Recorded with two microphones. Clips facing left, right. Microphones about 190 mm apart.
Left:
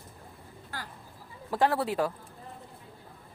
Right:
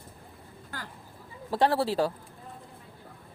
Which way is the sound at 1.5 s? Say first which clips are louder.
Right 2 dB; 30° right (ahead or behind).